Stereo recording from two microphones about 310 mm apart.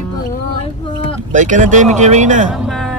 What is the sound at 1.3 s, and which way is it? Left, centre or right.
Speech, right.